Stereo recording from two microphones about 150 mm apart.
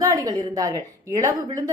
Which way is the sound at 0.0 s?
25° right (ahead or behind).